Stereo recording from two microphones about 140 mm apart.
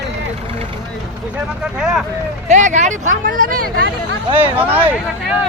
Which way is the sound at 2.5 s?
60° right (ahead or behind).